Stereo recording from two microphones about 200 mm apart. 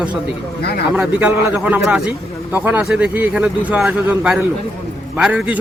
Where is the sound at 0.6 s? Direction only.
55° left (ahead or behind).